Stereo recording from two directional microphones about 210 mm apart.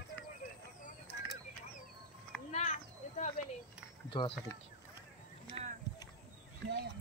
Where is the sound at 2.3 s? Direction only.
5° left (ahead or behind).